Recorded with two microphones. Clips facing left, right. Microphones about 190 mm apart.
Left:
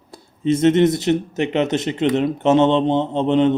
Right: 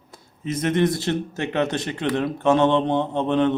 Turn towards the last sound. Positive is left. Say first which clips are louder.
# left 4 dB
turn(degrees=20)  # may be behind; listen again after turning